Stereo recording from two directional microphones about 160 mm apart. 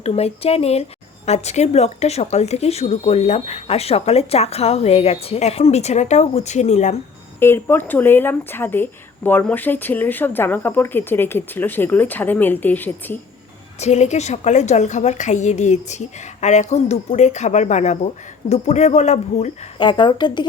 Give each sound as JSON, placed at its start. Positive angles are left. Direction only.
{"t": 0.0, "sound": "speech", "side_deg": 40}
{"t": 7.3, "sound": "speech", "side_deg": 15}
{"t": 13.7, "sound": "a woman's voice", "side_deg": 45}
{"t": 19.8, "sound": "speech", "side_deg": 30}